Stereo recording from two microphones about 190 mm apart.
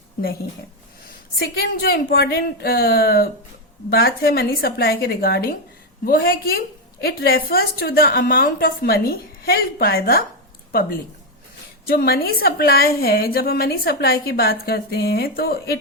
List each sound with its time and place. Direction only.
1.4 s a woman's voice: 55° left (ahead or behind)